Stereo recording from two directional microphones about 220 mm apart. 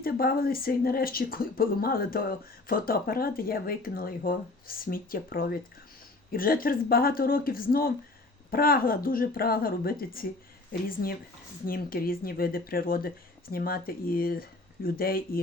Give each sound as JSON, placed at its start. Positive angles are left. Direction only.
{"t": 0.0, "sound": "speech", "side_deg": 40}